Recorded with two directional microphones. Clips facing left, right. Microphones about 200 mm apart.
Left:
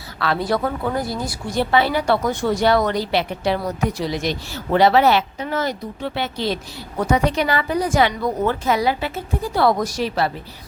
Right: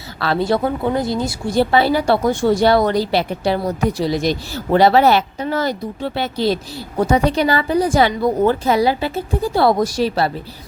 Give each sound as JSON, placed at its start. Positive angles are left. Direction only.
{"t": 0.2, "sound": "speech", "side_deg": -30}